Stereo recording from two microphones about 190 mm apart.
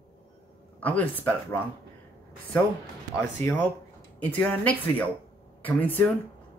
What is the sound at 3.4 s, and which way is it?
Speech, 10° left (ahead or behind).